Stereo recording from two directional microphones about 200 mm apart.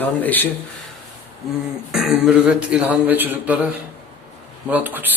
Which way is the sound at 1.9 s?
Centre (ahead or behind).